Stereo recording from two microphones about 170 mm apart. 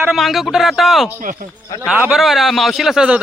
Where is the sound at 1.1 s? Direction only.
50° right (ahead or behind).